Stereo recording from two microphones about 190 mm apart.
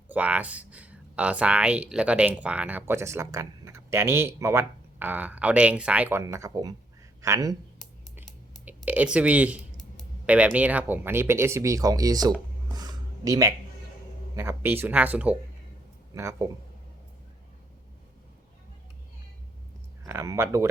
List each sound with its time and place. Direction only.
0.1 s speech: 5° right (ahead or behind)
8.6 s speech: 10° right (ahead or behind)
12.7 s a sound: 20° right (ahead or behind)
14.3 s speech: 10° right (ahead or behind)
20.1 s speech: 15° right (ahead or behind)